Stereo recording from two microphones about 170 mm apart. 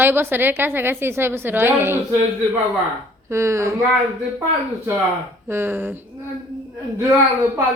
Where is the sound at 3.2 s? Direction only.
15° right (ahead or behind).